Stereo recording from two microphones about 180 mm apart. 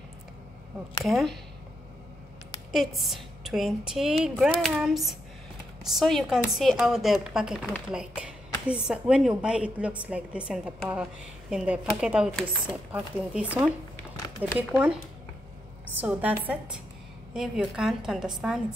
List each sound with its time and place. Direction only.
1.0 s a woman's voice: centre (ahead or behind)
2.7 s a woman's voice: centre (ahead or behind)
16.0 s a woman's voice: 10° right (ahead or behind)